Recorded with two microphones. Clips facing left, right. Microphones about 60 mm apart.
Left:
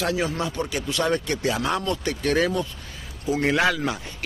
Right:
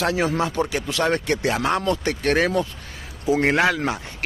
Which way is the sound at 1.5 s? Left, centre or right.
Right.